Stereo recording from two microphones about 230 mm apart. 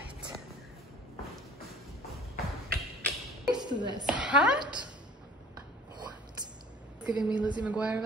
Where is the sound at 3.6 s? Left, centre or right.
Centre.